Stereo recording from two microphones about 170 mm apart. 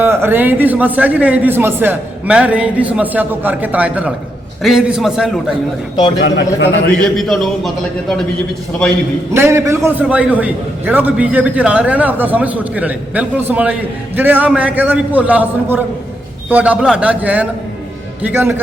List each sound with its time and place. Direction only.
0.0 s a man's voice: 15° right (ahead or behind)
6.1 s speech: 90° left
7.0 s a man's voice: centre (ahead or behind)
9.3 s a man's voice: 15° right (ahead or behind)